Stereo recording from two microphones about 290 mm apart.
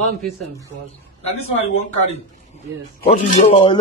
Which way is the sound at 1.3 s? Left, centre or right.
Left.